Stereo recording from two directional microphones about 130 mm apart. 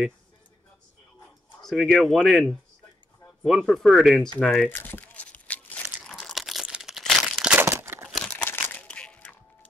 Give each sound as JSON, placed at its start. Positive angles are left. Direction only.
{"t": 1.6, "sound": "speech", "side_deg": 0}
{"t": 4.6, "sound": "crumpling", "side_deg": 15}
{"t": 6.1, "sound": "crumpling", "side_deg": 0}
{"t": 7.6, "sound": "crumpling", "side_deg": -20}
{"t": 8.3, "sound": "a sound", "side_deg": 15}